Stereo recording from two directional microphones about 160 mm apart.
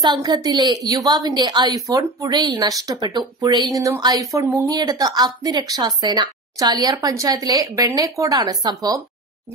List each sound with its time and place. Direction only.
0.0 s speech: 25° right (ahead or behind)